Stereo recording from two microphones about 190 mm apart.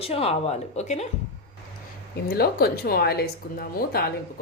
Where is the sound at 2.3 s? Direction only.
55° left (ahead or behind).